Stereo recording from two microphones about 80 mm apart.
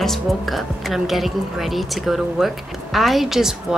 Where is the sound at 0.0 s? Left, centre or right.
Centre.